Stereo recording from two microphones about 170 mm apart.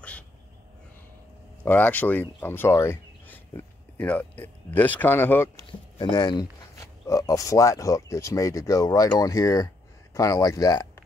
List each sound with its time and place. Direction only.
1.6 s speech: 10° left (ahead or behind)
5.7 s speech: 25° left (ahead or behind)